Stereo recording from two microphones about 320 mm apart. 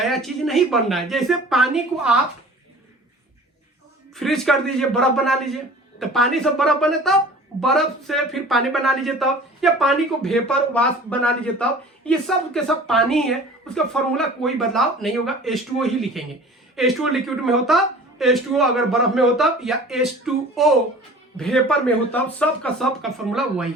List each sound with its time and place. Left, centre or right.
0.0 s speech: centre
4.1 s speech: centre